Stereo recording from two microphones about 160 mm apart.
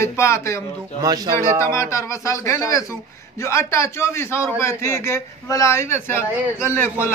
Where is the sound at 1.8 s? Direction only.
20° left (ahead or behind).